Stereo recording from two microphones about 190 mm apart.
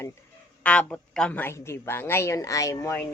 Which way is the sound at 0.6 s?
5° left (ahead or behind).